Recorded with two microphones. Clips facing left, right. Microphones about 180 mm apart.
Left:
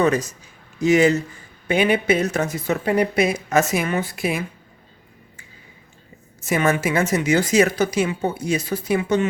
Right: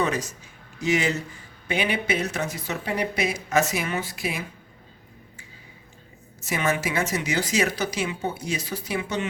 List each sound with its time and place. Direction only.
0.8 s a woman's voice: 45° left (ahead or behind)
6.4 s a woman's voice: 50° left (ahead or behind)